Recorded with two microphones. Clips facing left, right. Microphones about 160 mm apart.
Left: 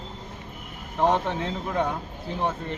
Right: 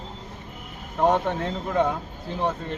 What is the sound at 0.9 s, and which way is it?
Speech, 10° right (ahead or behind).